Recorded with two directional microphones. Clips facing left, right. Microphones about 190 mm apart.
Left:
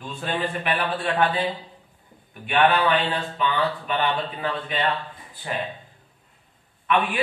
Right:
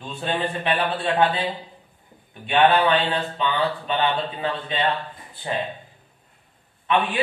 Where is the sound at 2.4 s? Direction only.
25° right (ahead or behind).